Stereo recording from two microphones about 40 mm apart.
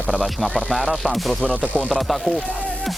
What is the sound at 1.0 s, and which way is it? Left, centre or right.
Speech, centre.